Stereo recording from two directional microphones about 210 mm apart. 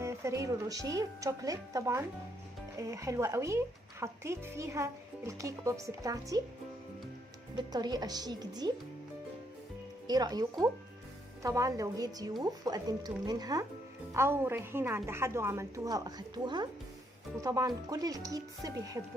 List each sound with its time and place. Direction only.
0.0 s a woman's voice: 15° right (ahead or behind)
7.5 s a woman's voice: 20° right (ahead or behind)
10.1 s a woman's voice: 20° right (ahead or behind)
11.4 s a woman's voice: 15° right (ahead or behind)